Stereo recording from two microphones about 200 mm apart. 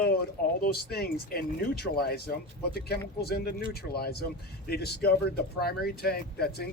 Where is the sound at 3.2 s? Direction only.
50° left (ahead or behind).